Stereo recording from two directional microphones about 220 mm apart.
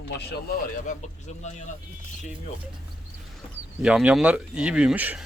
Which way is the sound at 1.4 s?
30° left (ahead or behind).